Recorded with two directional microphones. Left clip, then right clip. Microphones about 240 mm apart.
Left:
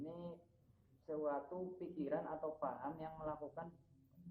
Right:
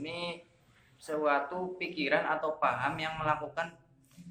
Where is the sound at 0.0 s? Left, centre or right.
Right.